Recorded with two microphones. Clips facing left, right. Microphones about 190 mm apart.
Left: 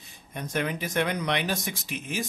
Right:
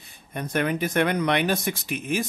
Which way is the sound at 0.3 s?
60° right (ahead or behind).